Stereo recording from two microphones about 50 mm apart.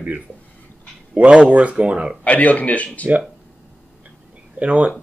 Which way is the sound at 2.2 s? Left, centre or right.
Left.